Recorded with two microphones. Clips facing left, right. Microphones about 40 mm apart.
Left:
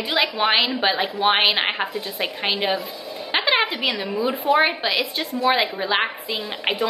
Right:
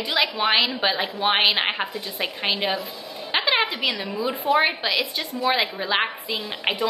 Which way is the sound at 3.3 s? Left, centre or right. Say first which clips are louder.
Left 2 dB; centre.